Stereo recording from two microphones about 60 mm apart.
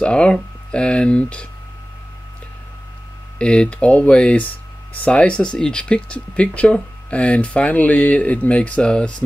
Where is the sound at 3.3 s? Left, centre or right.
Centre.